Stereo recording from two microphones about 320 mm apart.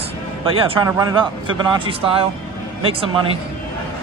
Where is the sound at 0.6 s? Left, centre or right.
Centre.